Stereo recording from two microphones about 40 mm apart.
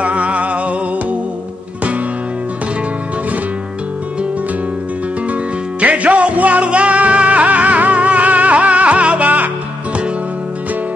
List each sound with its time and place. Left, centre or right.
0.0 s music: right
5.3 s music: right